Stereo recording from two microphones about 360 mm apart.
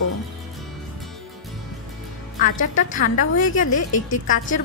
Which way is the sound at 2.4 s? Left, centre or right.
Left.